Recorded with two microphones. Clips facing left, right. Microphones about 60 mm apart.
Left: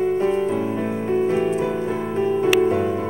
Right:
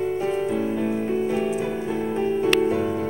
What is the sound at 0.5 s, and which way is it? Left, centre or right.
Music, centre.